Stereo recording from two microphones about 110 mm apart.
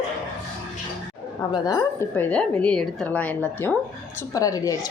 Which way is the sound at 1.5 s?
35° left (ahead or behind).